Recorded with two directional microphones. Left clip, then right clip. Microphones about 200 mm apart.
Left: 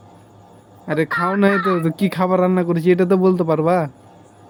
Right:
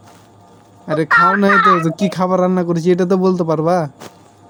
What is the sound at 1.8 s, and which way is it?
A man's voice, 10° right (ahead or behind).